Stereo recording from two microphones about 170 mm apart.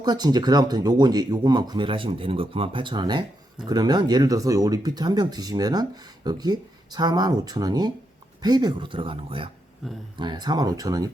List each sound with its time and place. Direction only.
0.0 s speech: 25° right (ahead or behind)
9.8 s speech: centre (ahead or behind)
10.2 s speech: 25° right (ahead or behind)